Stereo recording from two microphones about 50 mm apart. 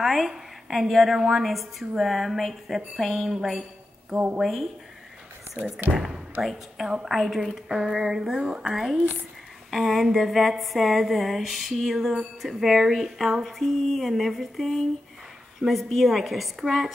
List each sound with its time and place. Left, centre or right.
0.0 s a woman's voice: centre
4.4 s a woman's voice: centre
5.9 s a woman's voice: centre
7.6 s a sound: centre
8.4 s a woman's voice: centre
8.6 s a woman's voice: centre